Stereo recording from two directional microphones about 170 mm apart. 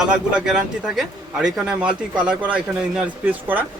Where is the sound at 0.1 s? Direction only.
5° right (ahead or behind).